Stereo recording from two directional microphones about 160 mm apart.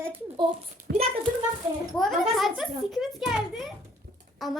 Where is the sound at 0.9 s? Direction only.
90° right.